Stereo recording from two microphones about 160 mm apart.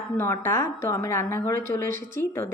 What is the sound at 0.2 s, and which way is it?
A woman's voice, 15° left (ahead or behind).